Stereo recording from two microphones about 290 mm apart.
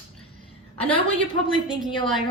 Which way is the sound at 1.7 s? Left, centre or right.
Centre.